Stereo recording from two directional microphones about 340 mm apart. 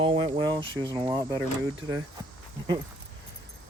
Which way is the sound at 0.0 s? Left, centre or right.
Centre.